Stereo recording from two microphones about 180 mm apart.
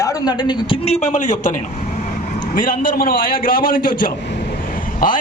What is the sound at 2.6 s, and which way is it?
A man's voice, 50° left (ahead or behind).